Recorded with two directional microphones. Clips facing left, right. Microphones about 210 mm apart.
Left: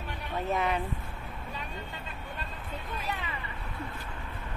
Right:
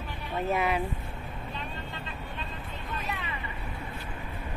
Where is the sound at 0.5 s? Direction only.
10° right (ahead or behind).